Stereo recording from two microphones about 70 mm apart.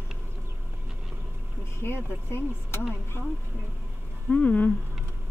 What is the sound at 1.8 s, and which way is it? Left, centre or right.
Speech, left.